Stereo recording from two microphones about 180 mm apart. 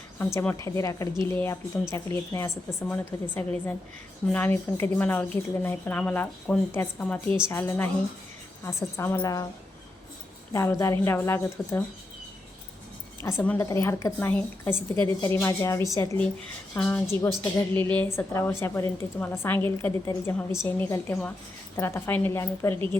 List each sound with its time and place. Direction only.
0.3 s a woman's voice: 15° left (ahead or behind)
10.5 s a woman's voice: 15° left (ahead or behind)
13.2 s a woman's voice: 10° left (ahead or behind)